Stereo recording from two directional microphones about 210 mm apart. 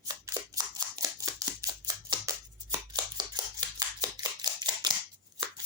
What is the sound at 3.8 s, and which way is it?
Scissors, 20° right (ahead or behind).